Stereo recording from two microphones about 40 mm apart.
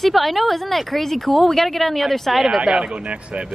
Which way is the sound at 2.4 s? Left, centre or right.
Centre.